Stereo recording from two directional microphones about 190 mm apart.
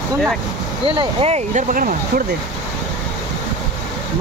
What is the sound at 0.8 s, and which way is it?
Speech, 30° right (ahead or behind).